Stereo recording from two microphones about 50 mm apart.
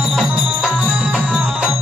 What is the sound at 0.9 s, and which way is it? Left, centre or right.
Music, right.